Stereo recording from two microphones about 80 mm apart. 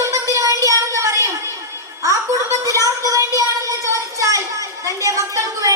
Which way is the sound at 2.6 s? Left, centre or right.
Right.